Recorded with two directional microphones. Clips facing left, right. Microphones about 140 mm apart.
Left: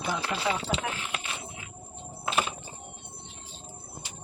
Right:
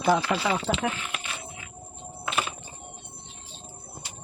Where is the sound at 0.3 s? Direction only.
65° right (ahead or behind).